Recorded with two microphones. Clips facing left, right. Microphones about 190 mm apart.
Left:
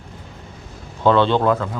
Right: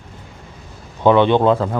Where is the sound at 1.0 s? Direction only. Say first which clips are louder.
Right 3 dB; 15° right (ahead or behind).